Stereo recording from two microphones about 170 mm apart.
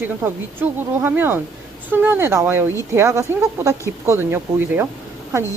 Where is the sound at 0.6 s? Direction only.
10° right (ahead or behind).